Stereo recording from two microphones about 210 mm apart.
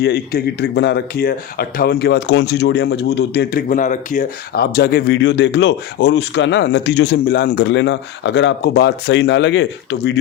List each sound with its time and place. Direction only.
0.0 s speech: 50° left (ahead or behind)